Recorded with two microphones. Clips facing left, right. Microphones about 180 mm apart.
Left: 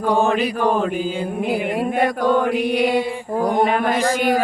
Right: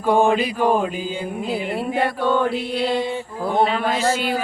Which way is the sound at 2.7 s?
10° left (ahead or behind).